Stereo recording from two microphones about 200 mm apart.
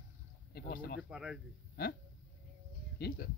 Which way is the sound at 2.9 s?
50° left (ahead or behind).